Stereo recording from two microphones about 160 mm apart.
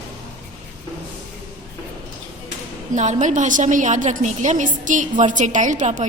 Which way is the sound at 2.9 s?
50° right (ahead or behind).